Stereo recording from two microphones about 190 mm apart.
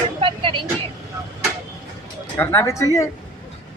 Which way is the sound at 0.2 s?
25° right (ahead or behind).